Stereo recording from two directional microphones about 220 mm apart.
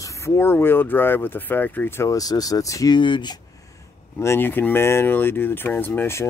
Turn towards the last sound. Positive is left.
turn(degrees=10)  # may be behind; listen again after turning